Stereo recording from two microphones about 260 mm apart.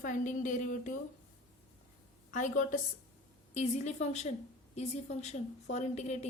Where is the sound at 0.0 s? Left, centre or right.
Left.